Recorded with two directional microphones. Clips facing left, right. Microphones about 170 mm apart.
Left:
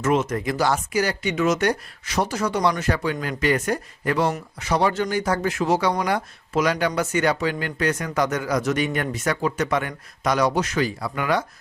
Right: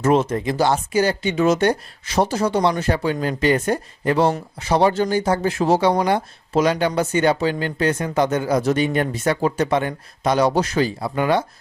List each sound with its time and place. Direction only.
0.0 s speech: 30° right (ahead or behind)